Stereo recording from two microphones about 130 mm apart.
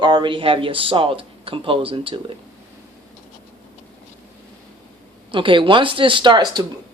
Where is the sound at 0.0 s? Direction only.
35° right (ahead or behind).